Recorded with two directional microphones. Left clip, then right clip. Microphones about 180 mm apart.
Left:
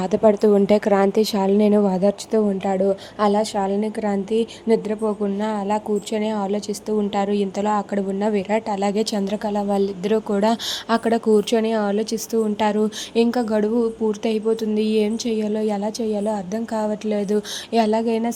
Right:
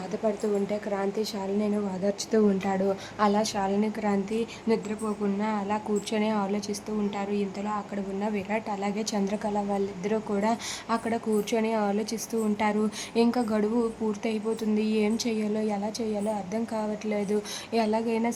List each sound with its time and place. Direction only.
0.0 s a woman's voice: 45° left (ahead or behind)
2.3 s a woman's voice: 25° left (ahead or behind)
7.1 s a woman's voice: 35° left (ahead or behind); by 18.3 s 20° left (ahead or behind)